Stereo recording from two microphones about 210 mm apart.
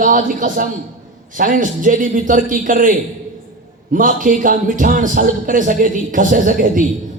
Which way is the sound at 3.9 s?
40° right (ahead or behind).